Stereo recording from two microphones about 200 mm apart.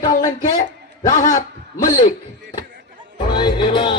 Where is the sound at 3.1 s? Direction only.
25° left (ahead or behind).